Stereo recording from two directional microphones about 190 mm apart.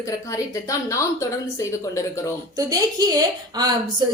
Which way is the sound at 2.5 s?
20° right (ahead or behind).